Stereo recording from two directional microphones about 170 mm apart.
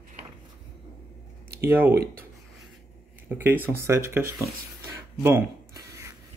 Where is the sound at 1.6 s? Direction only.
10° right (ahead or behind).